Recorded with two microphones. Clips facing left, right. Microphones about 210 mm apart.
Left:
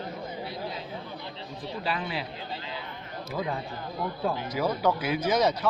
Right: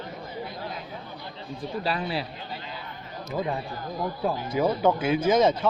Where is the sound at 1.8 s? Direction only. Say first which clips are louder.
Right 2 dB; 35° right (ahead or behind).